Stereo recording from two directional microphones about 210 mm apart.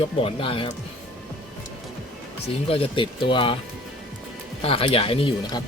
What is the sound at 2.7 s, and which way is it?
Speech, 25° left (ahead or behind).